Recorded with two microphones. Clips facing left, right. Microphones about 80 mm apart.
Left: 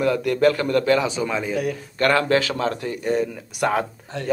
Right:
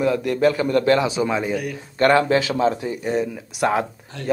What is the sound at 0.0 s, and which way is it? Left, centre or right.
A man's voice, centre.